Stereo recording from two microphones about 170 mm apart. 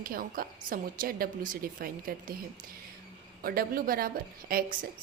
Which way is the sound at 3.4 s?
60° right (ahead or behind).